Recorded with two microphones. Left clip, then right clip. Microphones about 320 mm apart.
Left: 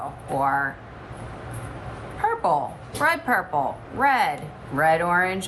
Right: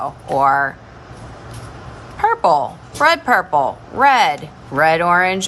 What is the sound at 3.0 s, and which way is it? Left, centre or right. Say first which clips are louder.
A woman's voice: right 8 dB; centre.